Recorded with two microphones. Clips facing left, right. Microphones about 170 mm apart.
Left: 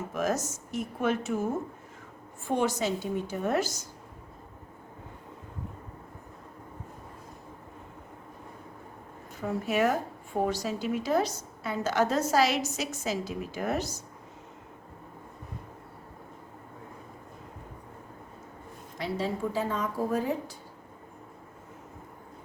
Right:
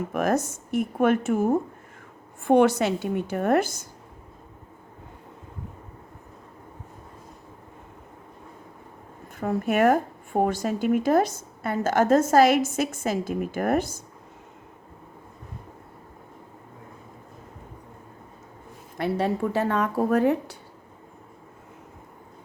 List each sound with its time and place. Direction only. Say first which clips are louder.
0.1 s speech: right 5 dB; 55° right (ahead or behind)
9.4 s a woman's voice: right 5 dB; 55° right (ahead or behind)
18.9 s speech: right 6 dB; 60° right (ahead or behind)